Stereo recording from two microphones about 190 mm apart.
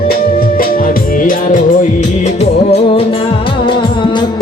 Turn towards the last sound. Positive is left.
turn(degrees=30)  # may be behind; listen again after turning